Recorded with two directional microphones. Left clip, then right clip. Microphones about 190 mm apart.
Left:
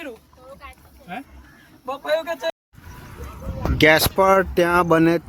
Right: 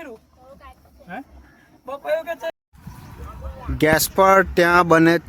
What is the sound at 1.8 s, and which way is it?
Speech, 20° right (ahead or behind).